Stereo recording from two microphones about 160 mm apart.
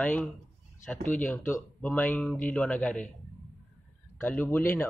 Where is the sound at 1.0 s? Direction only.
50° left (ahead or behind).